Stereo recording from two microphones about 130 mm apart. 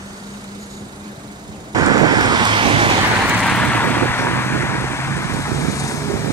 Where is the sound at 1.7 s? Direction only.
30° right (ahead or behind).